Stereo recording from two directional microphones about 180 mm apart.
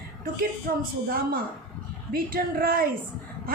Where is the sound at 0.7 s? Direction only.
55° right (ahead or behind).